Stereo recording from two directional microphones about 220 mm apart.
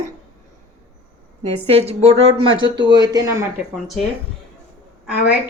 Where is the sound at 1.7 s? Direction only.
30° right (ahead or behind).